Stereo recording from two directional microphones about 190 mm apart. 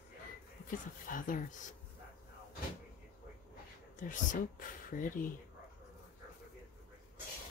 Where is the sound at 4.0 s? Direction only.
45° left (ahead or behind).